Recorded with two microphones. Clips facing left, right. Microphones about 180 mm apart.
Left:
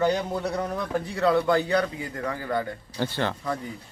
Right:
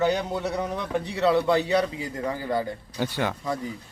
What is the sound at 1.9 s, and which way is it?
Speech, 20° right (ahead or behind).